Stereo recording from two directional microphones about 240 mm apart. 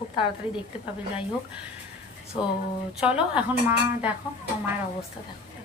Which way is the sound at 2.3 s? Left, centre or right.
Centre.